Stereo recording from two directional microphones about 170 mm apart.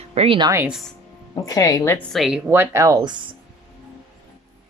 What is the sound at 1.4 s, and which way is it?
Speech, 20° left (ahead or behind).